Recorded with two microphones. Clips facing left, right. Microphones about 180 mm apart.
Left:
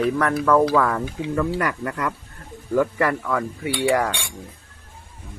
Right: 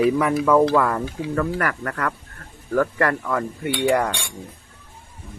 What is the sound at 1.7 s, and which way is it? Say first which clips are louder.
Speech: even; 15° left (ahead or behind).